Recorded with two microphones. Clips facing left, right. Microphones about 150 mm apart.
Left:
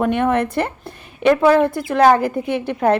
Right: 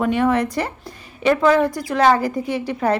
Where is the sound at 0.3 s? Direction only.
55° left (ahead or behind).